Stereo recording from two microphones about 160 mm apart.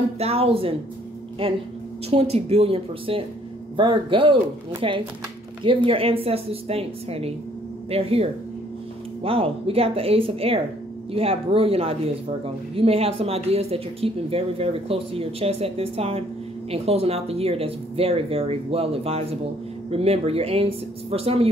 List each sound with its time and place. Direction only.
0.2 s speech: 40° right (ahead or behind)
2.0 s speech: 40° right (ahead or behind)